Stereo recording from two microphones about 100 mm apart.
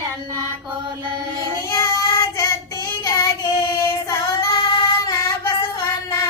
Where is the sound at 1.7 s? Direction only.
30° left (ahead or behind).